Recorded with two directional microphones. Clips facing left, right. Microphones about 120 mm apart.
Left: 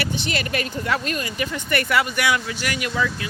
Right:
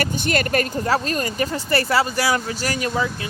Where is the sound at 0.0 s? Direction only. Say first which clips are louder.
Right 4 dB; 45° right (ahead or behind).